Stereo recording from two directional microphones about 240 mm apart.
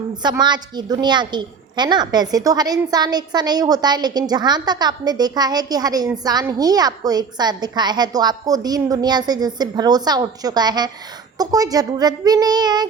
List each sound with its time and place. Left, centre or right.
0.2 s a woman's voice: centre